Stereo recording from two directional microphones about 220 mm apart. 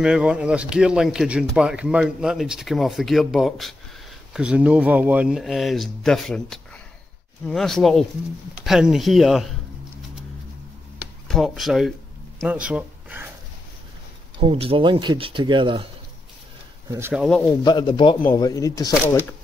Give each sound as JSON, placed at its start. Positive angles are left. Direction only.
{"t": 0.0, "sound": "speech", "side_deg": -5}
{"t": 11.2, "sound": "speech", "side_deg": 0}
{"t": 14.4, "sound": "speech", "side_deg": -25}
{"t": 16.9, "sound": "speech", "side_deg": -5}
{"t": 17.6, "sound": "speech", "side_deg": 20}